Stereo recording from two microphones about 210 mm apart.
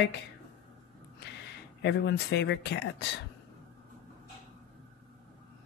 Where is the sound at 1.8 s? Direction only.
55° left (ahead or behind).